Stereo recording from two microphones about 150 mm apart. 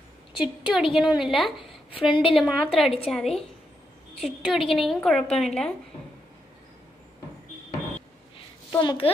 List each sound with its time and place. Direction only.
0.4 s a woman's voice: 5° right (ahead or behind)
1.9 s a child's voice: 35° left (ahead or behind)
2.2 s a woman's voice: centre (ahead or behind)
8.7 s a child's voice: 35° left (ahead or behind)